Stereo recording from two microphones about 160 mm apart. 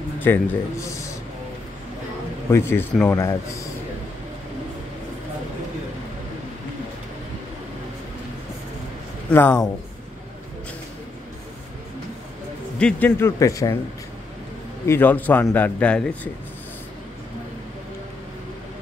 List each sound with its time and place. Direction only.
0.2 s a man's voice: 15° left (ahead or behind)
2.5 s a man's voice: 15° left (ahead or behind)
9.3 s a man's voice: 10° left (ahead or behind)
12.7 s a man's voice: 10° left (ahead or behind)
14.9 s a man's voice: 10° left (ahead or behind)